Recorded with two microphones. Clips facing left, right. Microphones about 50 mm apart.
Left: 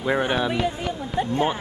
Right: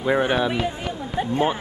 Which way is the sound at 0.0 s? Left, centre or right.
Centre.